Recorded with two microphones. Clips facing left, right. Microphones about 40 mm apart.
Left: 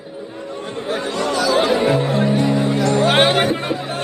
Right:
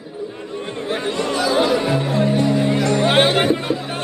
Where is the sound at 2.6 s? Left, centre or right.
Right.